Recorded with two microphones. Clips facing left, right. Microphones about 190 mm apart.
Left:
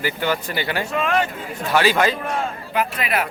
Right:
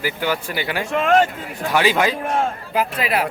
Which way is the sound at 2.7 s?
30° right (ahead or behind).